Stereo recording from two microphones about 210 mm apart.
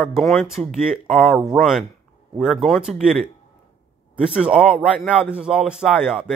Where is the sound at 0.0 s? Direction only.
Centre (ahead or behind).